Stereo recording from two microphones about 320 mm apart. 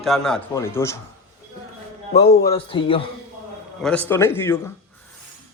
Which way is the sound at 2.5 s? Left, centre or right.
Centre.